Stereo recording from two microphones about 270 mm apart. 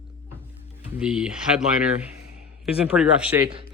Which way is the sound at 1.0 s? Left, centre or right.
Centre.